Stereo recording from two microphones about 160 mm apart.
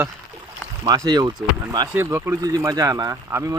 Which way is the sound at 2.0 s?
15° right (ahead or behind).